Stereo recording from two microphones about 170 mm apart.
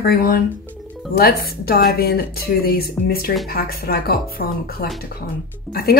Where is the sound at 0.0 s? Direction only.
65° left (ahead or behind).